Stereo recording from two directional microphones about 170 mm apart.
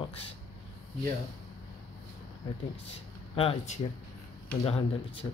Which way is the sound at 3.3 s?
35° left (ahead or behind).